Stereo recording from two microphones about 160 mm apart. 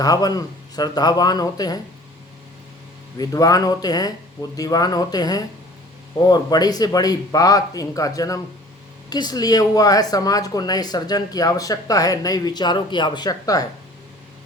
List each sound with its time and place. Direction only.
0.0 s speech: 25° left (ahead or behind)
3.2 s speech: 20° left (ahead or behind)